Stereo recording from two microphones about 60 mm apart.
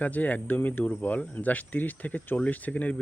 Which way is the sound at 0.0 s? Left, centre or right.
Left.